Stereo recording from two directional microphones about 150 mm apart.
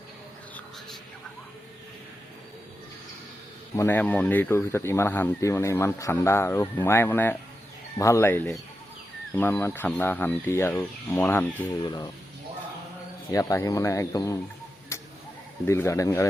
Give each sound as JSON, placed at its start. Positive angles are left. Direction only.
{"t": 3.8, "sound": "speech", "side_deg": 15}
{"t": 11.9, "sound": "speech", "side_deg": 25}
{"t": 13.3, "sound": "speech", "side_deg": 20}
{"t": 14.9, "sound": "a sound", "side_deg": 20}
{"t": 15.6, "sound": "speech", "side_deg": 15}